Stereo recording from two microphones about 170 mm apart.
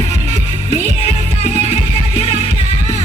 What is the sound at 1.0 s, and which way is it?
Music, 35° left (ahead or behind).